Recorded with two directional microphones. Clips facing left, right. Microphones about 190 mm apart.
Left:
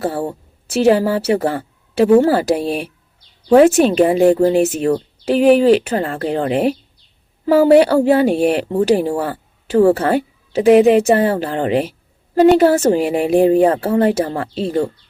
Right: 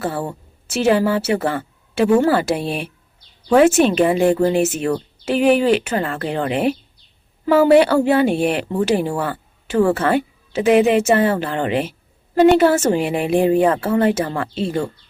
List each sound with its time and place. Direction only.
0.0 s a woman's voice: 35° left (ahead or behind)